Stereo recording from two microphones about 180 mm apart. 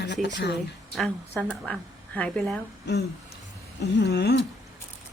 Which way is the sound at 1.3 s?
10° left (ahead or behind).